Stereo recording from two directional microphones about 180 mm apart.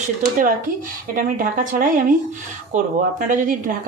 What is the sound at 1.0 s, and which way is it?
Speech, 50° right (ahead or behind).